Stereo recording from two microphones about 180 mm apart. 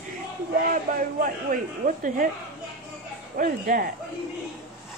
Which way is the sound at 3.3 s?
50° right (ahead or behind).